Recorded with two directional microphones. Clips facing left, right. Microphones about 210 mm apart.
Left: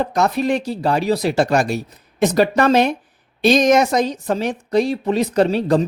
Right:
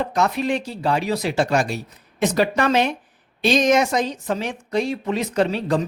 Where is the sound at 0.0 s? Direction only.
40° left (ahead or behind).